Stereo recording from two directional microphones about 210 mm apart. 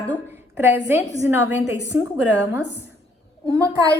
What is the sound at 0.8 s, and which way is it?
Speech, 10° right (ahead or behind).